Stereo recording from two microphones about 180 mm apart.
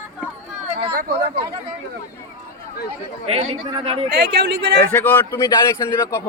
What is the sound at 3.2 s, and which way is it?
Speech, 35° right (ahead or behind).